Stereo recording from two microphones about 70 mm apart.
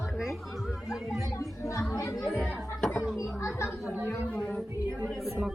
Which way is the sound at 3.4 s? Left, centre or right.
Left.